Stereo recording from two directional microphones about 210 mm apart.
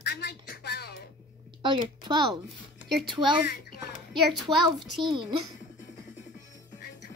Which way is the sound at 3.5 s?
45° left (ahead or behind).